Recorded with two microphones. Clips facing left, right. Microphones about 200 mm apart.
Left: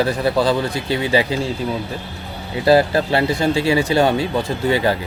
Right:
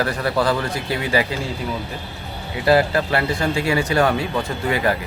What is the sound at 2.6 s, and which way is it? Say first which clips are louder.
Speech: left 3 dB; 30° left (ahead or behind).